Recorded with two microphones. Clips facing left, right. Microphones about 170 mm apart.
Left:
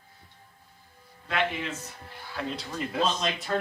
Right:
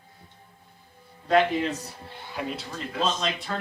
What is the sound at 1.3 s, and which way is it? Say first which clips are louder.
Speech: right 8 dB; 35° right (ahead or behind).